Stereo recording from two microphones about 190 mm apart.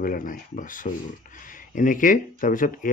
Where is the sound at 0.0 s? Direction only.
45° left (ahead or behind).